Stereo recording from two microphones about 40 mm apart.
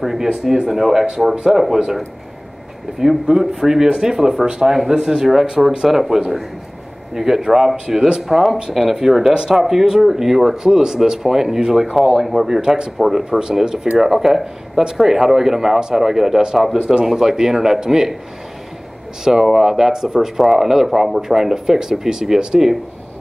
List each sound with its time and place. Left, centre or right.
0.0 s speech: centre
3.0 s speech: centre
9.3 s speech: right
9.6 s speech: centre
13.9 s speech: centre
19.2 s speech: centre